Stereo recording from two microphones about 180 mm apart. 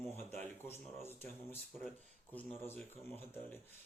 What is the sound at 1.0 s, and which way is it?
Speech, 10° left (ahead or behind).